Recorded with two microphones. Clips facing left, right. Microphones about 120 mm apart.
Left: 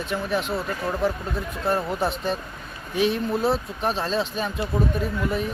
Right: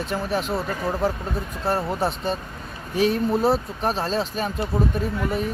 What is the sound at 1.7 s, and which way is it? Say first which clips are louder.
Speech: even; 30° right (ahead or behind).